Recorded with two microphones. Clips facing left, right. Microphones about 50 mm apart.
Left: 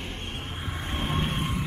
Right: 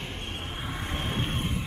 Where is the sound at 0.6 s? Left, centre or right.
Centre.